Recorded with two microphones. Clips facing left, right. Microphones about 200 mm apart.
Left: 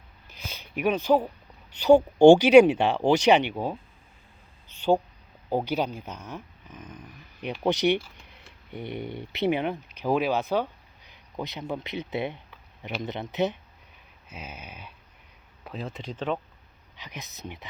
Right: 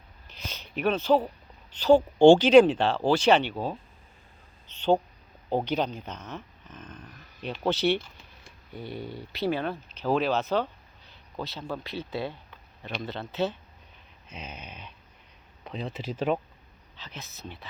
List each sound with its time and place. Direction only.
0.3 s a sound: 10° left (ahead or behind)
1.7 s speech: 10° left (ahead or behind)
4.7 s insect: 10° left (ahead or behind)
5.5 s speech: 10° left (ahead or behind); by 16.4 s 10° right (ahead or behind)
17.0 s speech: 15° left (ahead or behind)